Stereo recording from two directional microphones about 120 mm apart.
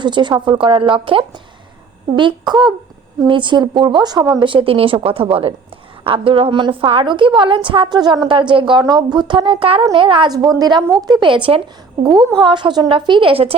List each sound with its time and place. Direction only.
0.0 s a woman's voice: 40° right (ahead or behind)